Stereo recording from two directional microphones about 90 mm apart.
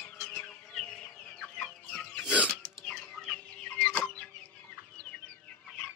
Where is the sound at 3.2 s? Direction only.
10° left (ahead or behind).